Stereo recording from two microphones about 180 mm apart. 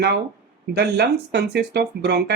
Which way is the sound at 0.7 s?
65° right (ahead or behind).